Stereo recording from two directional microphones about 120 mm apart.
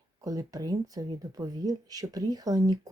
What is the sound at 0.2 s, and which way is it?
Speech, 30° right (ahead or behind).